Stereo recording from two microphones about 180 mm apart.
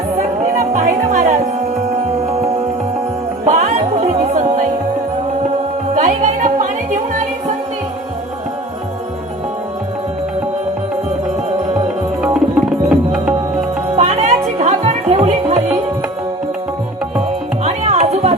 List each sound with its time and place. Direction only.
0.7 s music: 40° right (ahead or behind)
3.4 s music: 40° right (ahead or behind)
6.0 s music: 40° right (ahead or behind)
12.2 s tabla: 5° right (ahead or behind)
13.8 s music: 35° right (ahead or behind)
17.6 s music: 35° right (ahead or behind)